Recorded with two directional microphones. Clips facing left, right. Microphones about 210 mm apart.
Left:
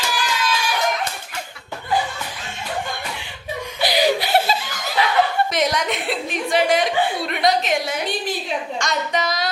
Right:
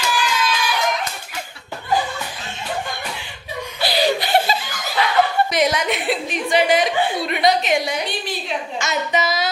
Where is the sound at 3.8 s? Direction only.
15° left (ahead or behind).